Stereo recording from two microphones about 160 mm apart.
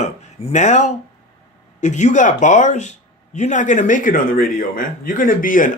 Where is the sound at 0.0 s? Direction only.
45° left (ahead or behind).